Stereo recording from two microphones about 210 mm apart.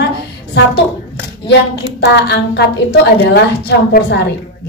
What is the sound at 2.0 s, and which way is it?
A woman's voice, 55° left (ahead or behind).